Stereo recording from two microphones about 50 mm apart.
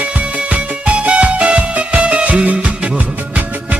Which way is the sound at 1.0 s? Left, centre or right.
Right.